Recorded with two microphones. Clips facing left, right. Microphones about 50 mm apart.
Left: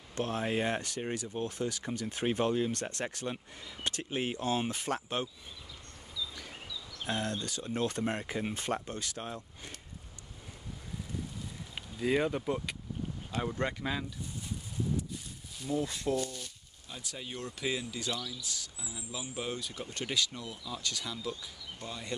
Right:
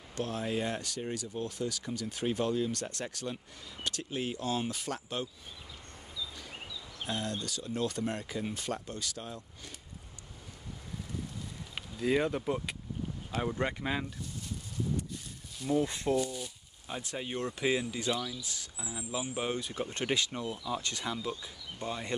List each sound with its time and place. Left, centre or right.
0.1 s speech: left
6.7 s a sound: right
7.1 s speech: left
12.0 s speech: centre
15.7 s speech: right
16.2 s speech: centre
16.8 s speech: right